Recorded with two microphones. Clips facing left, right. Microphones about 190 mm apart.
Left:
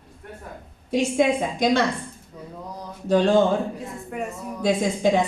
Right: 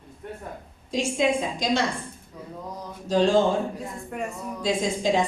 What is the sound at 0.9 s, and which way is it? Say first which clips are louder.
Speech: left 3 dB; 60° left (ahead or behind).